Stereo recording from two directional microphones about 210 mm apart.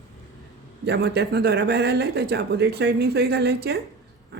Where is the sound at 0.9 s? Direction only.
50° right (ahead or behind).